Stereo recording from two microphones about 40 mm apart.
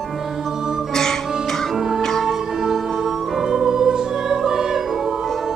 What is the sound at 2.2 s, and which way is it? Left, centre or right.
Music, centre.